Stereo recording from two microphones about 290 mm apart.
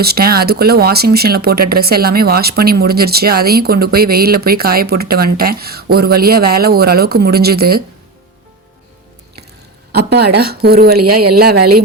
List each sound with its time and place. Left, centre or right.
0.0 s speech: right
9.9 s speech: right